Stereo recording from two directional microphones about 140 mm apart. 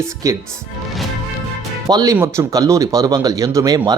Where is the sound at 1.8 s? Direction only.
25° right (ahead or behind).